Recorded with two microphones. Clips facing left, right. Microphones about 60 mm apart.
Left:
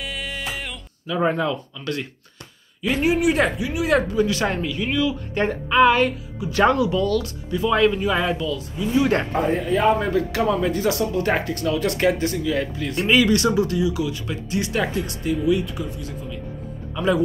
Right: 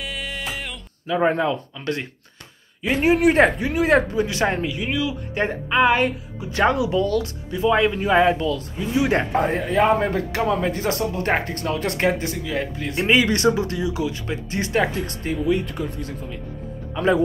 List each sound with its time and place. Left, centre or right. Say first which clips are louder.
0.0 s music: even; centre
1.0 s speech: right 2 dB; right
8.5 s a man's voice: right 2 dB; right
8.9 s speech: left 1 dB; centre
9.4 s a man's voice: left 1 dB; right